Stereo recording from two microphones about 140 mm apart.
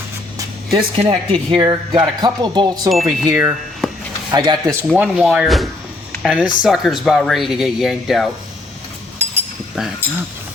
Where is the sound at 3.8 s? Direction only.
Centre (ahead or behind).